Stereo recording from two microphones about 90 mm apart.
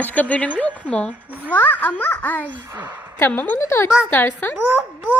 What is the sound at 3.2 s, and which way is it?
A woman's voice, 20° left (ahead or behind).